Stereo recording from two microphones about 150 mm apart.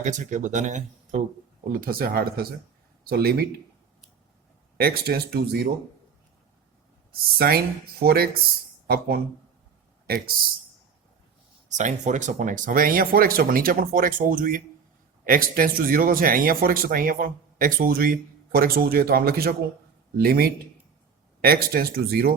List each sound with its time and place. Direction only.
0.0 s speech: 55° right (ahead or behind)
1.7 s speech: 80° right
4.8 s speech: 90° right
7.3 s speech: 90° right
11.7 s speech: 55° right (ahead or behind); by 22.4 s 90° right